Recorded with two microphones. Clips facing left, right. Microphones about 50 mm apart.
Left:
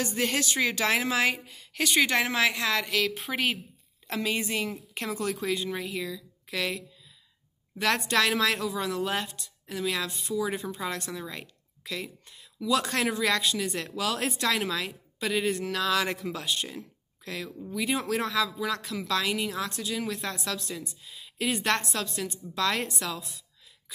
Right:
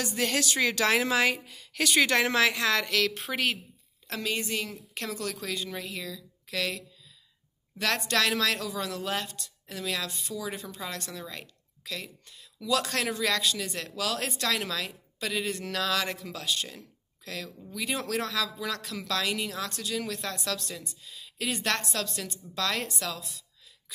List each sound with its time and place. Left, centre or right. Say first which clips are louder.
0.0 s a woman's voice: left 1 dB; left; by 3.5 s centre
4.1 s a woman's voice: left 2 dB; left